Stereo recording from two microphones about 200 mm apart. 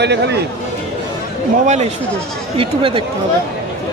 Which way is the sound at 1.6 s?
35° right (ahead or behind).